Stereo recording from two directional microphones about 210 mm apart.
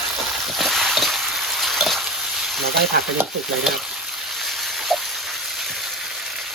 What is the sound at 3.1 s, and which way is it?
Stir, centre (ahead or behind).